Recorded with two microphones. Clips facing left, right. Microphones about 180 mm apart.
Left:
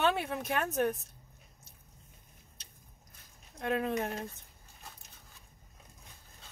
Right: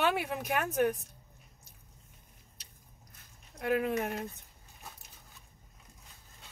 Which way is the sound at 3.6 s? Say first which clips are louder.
Right 2 dB; 25° left (ahead or behind).